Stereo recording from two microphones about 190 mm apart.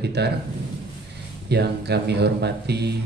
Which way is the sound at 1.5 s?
60° right (ahead or behind).